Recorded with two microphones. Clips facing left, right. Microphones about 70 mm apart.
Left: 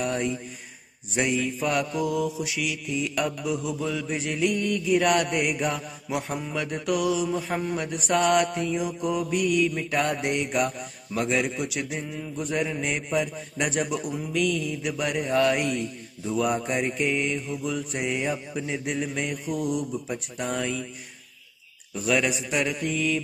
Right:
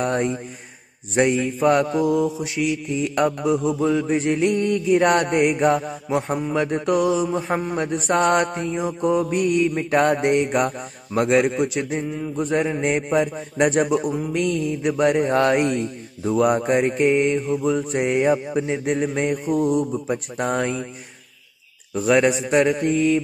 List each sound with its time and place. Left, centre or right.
0.0 s a man's voice: right
11.1 s a man's voice: right
21.9 s a man's voice: right